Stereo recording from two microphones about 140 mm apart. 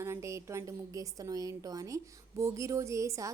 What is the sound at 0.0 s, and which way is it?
A woman's voice, 20° right (ahead or behind).